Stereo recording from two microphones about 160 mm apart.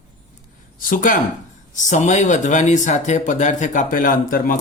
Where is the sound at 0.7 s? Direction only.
55° left (ahead or behind).